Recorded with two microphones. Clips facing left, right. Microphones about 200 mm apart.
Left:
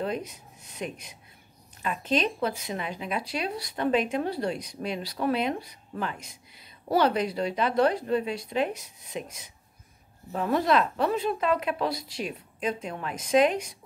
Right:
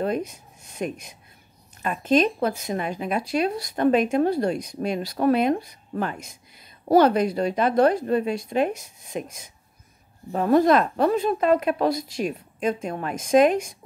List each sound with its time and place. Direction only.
0.0 s speech: 45° right (ahead or behind)